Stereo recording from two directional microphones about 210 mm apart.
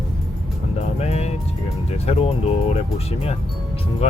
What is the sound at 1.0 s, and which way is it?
Speech, 30° left (ahead or behind).